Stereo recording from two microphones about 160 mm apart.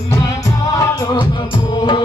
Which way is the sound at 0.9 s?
25° left (ahead or behind).